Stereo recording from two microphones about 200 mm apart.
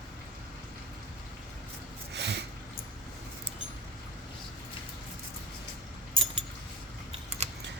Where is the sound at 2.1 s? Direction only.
60° right (ahead or behind).